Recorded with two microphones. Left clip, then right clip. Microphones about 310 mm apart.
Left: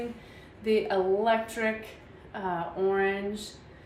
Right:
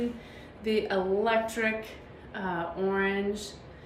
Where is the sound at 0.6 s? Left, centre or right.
Centre.